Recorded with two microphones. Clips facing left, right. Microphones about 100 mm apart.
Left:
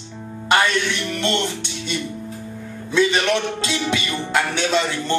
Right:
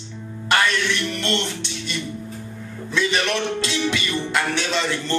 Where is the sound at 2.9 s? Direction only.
25° left (ahead or behind).